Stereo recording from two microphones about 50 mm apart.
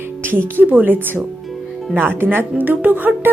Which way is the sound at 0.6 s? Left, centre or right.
Right.